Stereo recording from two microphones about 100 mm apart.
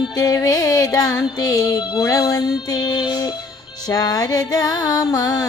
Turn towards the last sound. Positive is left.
turn(degrees=40)  # may be behind; listen again after turning